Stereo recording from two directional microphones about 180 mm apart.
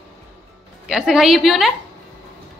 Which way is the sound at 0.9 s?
Centre (ahead or behind).